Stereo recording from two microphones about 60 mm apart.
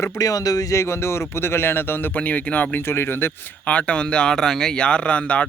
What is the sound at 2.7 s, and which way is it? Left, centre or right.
Speech, left.